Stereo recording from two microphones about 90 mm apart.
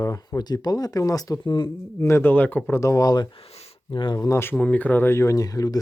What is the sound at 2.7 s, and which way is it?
Speech, 35° left (ahead or behind).